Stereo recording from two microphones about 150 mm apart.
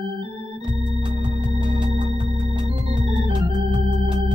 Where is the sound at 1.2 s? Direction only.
30° right (ahead or behind).